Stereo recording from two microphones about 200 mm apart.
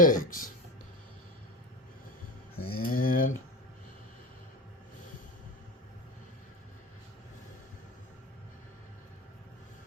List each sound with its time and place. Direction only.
0.0 s speech: 45° left (ahead or behind)
2.6 s a sound: 90° left
2.8 s speech: 45° left (ahead or behind)